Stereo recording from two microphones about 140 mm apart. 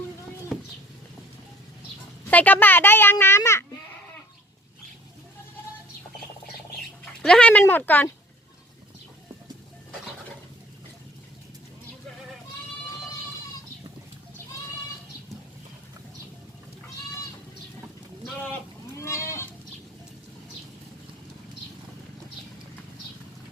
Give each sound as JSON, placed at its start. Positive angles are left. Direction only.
{"t": 2.3, "sound": "a child's voice", "side_deg": 10}
{"t": 7.0, "sound": "speech", "side_deg": 5}
{"t": 18.4, "sound": "sheep", "side_deg": 15}